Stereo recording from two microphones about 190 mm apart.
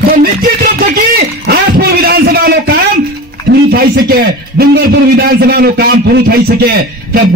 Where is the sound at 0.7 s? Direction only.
50° right (ahead or behind).